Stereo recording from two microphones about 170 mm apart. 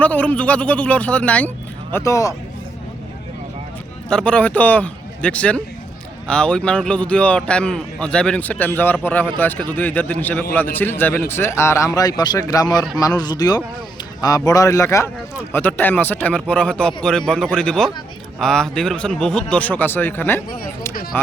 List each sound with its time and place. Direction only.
0.0 s speech: 10° left (ahead or behind)
4.1 s a man's voice: 5° left (ahead or behind)